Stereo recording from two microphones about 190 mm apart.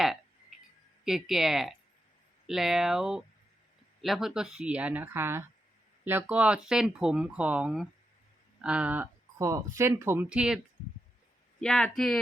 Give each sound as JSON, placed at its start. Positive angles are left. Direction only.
{"t": 1.0, "sound": "speech", "side_deg": 0}
{"t": 11.6, "sound": "speech", "side_deg": 5}